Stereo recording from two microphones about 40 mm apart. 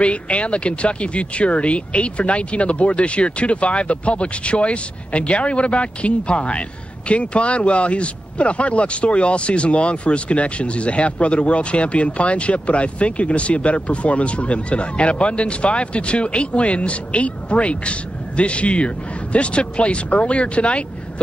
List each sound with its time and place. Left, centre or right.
0.0 s speech: left